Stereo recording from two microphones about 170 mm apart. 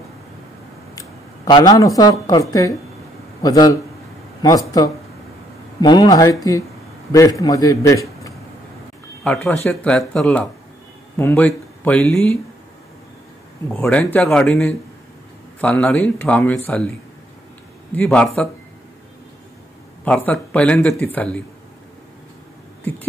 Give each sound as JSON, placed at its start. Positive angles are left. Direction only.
{"t": 0.9, "sound": "a man's voice", "side_deg": 20}
{"t": 9.2, "sound": "speech", "side_deg": 5}
{"t": 13.7, "sound": "speech", "side_deg": 10}
{"t": 17.9, "sound": "speech", "side_deg": 5}
{"t": 20.1, "sound": "speech", "side_deg": 10}